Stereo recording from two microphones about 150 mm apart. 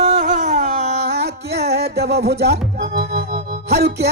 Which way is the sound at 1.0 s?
90° right.